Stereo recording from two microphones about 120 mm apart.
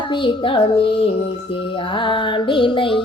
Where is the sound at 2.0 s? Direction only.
45° left (ahead or behind).